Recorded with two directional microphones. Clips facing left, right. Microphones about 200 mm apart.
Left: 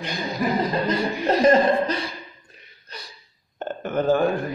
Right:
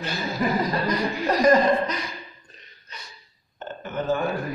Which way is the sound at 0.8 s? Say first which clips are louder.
Left 2 dB; 25° left (ahead or behind).